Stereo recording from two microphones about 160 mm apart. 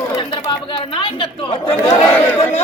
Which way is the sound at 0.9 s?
35° left (ahead or behind).